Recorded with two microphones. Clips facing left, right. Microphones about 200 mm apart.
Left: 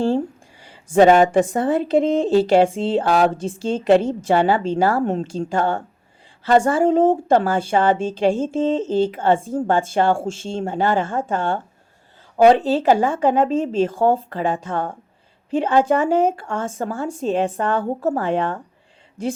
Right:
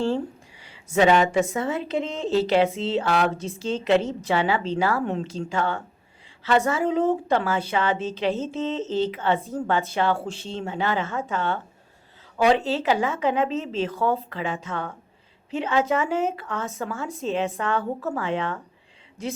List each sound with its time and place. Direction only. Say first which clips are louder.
0.6 s a woman's voice: left 7 dB; 50° left (ahead or behind)
15.4 s a woman's voice: left 7 dB; 50° left (ahead or behind)
16.0 s speech: left 7 dB; 35° left (ahead or behind)
16.4 s a woman's voice: left 5 dB; 50° left (ahead or behind)
16.7 s speech: left 5 dB; 35° left (ahead or behind)
17.1 s a woman's voice: left 5 dB; 50° left (ahead or behind)